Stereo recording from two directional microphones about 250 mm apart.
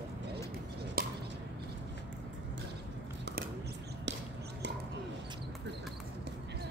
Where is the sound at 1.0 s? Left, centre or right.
Right.